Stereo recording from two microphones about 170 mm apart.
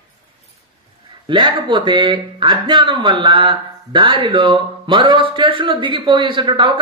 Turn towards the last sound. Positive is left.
turn(degrees=-30)  # may be behind; listen again after turning